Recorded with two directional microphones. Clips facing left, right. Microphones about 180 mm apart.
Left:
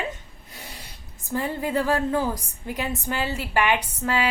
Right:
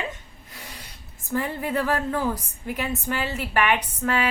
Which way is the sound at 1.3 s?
15° left (ahead or behind).